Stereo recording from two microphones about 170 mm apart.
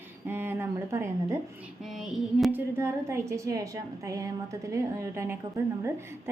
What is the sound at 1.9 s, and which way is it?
A woman's voice, centre (ahead or behind).